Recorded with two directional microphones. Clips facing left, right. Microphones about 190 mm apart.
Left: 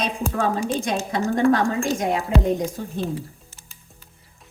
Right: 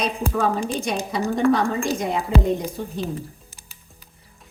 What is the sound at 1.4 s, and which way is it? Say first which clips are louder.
Speech: left 1 dB; 90° left.